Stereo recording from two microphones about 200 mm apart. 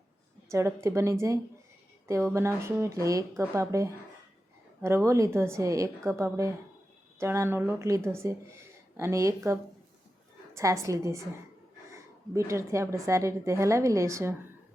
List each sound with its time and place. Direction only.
0.5 s speech: 15° right (ahead or behind)